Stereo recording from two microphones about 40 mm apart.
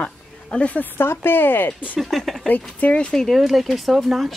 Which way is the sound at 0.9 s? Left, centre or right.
Left.